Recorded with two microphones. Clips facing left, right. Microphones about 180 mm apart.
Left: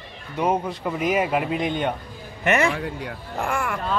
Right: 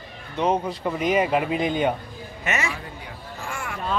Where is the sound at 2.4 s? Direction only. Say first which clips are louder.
Left 8 dB; 60° left (ahead or behind).